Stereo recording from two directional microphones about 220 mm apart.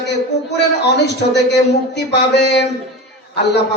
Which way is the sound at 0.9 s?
50° left (ahead or behind).